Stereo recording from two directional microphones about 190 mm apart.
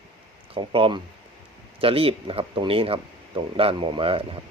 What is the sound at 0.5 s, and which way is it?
Speech, 25° right (ahead or behind).